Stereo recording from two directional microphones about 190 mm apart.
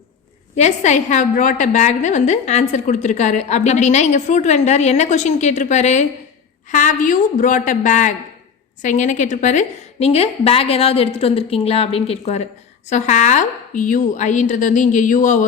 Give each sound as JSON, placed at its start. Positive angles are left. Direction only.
{"t": 0.5, "sound": "a woman's voice", "side_deg": 35}